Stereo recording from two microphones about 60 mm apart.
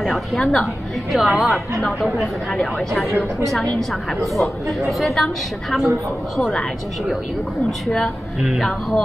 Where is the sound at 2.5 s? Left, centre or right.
Centre.